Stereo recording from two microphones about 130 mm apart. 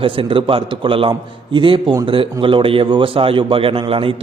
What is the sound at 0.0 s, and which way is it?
A man's voice, 40° right (ahead or behind).